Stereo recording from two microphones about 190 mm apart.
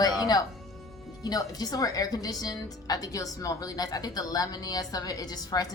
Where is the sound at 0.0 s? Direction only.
20° left (ahead or behind).